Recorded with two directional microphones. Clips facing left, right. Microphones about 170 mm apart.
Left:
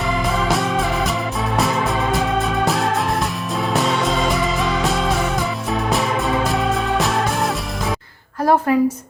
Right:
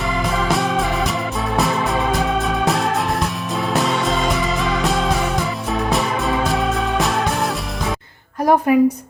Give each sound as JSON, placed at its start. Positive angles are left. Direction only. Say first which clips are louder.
{"t": 0.4, "sound": "music", "louder": "right 2 dB", "side_deg": 0}
{"t": 3.7, "sound": "music", "louder": "even", "side_deg": 0}
{"t": 8.4, "sound": "a woman's voice", "louder": "right 1 dB", "side_deg": -15}